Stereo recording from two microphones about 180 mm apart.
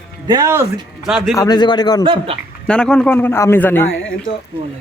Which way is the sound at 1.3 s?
20° left (ahead or behind).